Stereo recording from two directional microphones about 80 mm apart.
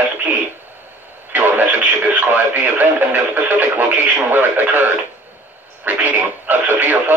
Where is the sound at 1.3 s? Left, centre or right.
Right.